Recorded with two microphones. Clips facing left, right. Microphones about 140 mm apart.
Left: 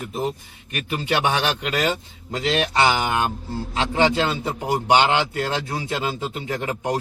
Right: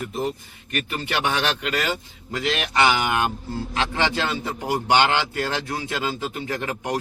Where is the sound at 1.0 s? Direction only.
20° left (ahead or behind).